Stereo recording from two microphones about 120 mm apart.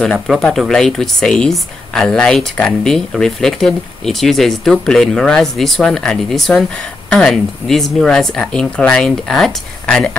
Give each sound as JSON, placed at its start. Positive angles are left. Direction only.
{"t": 0.0, "sound": "speech", "side_deg": 5}